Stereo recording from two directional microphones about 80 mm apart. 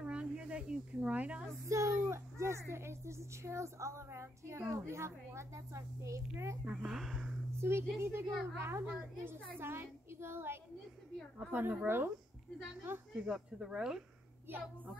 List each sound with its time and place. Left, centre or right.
0.0 s snake: centre
1.7 s a woman's voice: right
6.6 s speech: centre
7.5 s a woman's voice: right
13.1 s speech: centre
14.5 s a woman's voice: right